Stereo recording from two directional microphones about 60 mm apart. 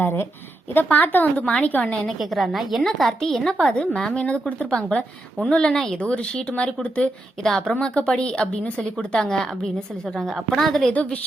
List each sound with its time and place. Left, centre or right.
0.0 s a woman's voice: left
2.0 s a woman's voice: centre
3.8 s a woman's voice: centre
7.4 s a woman's voice: centre
7.7 s a woman's voice: centre
10.9 s a woman's voice: left